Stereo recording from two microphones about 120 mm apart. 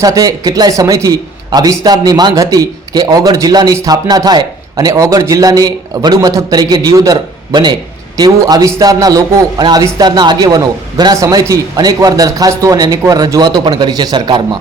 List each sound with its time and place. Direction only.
0.0 s a man's voice: 30° right (ahead or behind)